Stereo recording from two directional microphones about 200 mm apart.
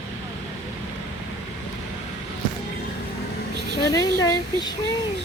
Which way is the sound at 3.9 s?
20° left (ahead or behind).